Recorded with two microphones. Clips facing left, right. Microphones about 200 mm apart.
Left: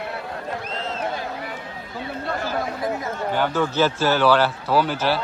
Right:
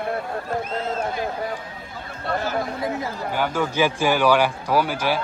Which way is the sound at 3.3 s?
10° right (ahead or behind).